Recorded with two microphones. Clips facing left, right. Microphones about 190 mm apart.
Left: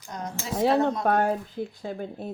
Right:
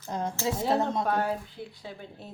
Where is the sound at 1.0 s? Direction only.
50° left (ahead or behind).